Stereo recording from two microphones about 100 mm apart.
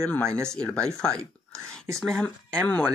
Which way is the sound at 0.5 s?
10° left (ahead or behind).